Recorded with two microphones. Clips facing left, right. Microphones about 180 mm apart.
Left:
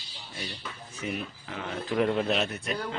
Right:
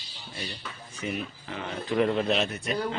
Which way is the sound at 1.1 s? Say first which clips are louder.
Right 1 dB; centre (ahead or behind).